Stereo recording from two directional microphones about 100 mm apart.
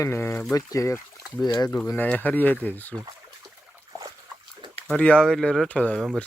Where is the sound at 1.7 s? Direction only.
20° left (ahead or behind).